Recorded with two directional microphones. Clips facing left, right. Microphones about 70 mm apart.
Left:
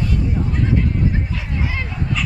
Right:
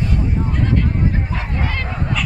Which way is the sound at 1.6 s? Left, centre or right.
Centre.